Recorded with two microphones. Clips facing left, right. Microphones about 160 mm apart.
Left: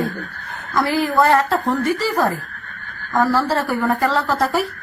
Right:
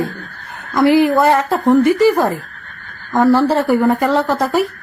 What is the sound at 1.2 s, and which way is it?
Speech, 20° right (ahead or behind).